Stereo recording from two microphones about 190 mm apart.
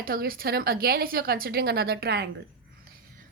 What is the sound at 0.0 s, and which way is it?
A woman's voice, 50° right (ahead or behind).